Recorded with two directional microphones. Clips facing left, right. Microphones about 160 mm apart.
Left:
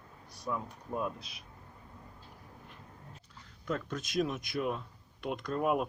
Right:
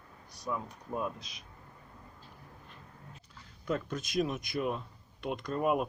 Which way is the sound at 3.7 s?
5° right (ahead or behind).